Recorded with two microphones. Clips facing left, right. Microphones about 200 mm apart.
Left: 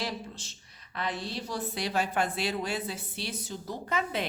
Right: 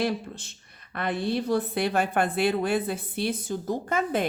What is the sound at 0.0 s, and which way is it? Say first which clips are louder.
A woman's voice: right 8 dB; 55° right (ahead or behind).